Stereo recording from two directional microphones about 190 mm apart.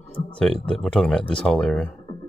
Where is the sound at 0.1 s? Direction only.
5° left (ahead or behind).